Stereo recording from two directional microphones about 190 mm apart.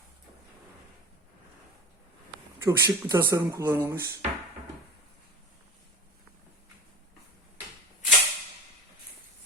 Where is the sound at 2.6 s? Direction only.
20° right (ahead or behind).